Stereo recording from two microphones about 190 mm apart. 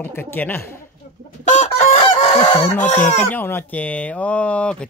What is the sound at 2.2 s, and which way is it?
Fowl, 20° left (ahead or behind).